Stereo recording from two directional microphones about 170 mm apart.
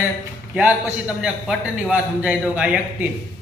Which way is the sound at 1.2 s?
5° right (ahead or behind).